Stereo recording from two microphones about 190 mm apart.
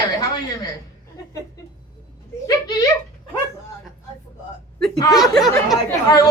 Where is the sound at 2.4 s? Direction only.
20° left (ahead or behind).